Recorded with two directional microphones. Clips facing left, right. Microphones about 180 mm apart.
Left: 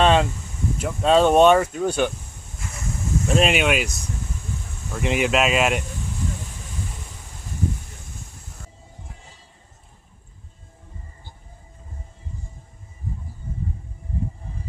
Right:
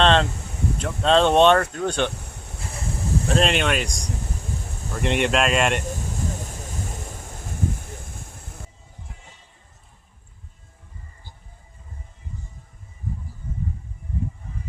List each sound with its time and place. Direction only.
0.0 s a sound: 10° left (ahead or behind)
0.8 s speech: 5° left (ahead or behind)
2.2 s vehicle: 70° right (ahead or behind)
3.2 s speech: 5° left (ahead or behind)
4.9 s speech: 5° left (ahead or behind)
6.3 s a sound: 45° right (ahead or behind)